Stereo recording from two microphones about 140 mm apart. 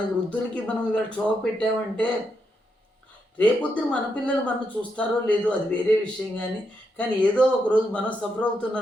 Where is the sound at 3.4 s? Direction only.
10° left (ahead or behind).